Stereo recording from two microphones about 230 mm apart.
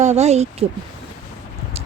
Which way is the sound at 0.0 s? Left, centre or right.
Right.